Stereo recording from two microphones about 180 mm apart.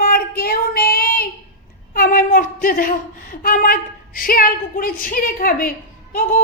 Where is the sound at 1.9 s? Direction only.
55° left (ahead or behind).